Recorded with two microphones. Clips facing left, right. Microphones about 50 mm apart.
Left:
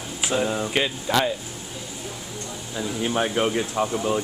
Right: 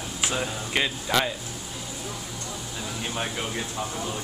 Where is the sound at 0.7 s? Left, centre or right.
Centre.